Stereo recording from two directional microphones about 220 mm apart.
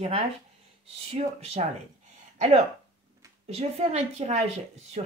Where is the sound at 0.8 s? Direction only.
30° right (ahead or behind).